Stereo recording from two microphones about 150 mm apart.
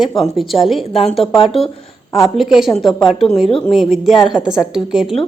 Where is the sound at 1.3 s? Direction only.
40° left (ahead or behind).